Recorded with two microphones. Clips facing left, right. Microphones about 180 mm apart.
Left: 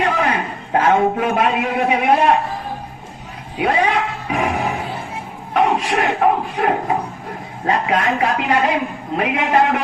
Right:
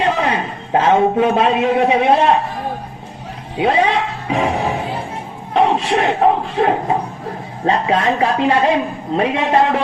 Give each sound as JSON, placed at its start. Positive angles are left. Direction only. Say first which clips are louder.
{"t": 0.0, "sound": "a man's voice", "louder": "right 1 dB", "side_deg": -25}
{"t": 3.6, "sound": "a man's voice", "louder": "right 2 dB", "side_deg": -25}